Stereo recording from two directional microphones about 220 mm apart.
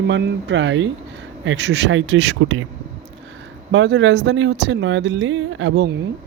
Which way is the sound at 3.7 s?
55° right (ahead or behind).